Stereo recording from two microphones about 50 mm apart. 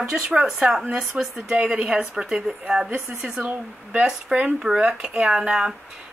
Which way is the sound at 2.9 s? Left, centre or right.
Right.